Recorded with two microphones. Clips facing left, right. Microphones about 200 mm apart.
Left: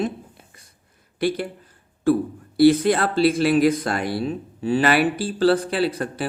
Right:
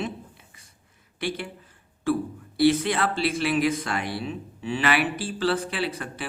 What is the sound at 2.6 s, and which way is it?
Speech, 40° left (ahead or behind).